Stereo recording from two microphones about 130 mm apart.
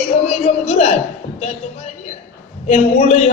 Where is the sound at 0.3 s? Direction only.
55° left (ahead or behind).